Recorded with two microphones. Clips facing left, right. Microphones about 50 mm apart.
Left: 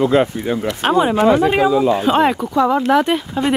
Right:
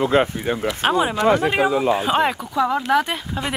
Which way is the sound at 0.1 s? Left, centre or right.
Right.